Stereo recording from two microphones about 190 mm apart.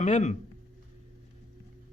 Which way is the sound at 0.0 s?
40° left (ahead or behind).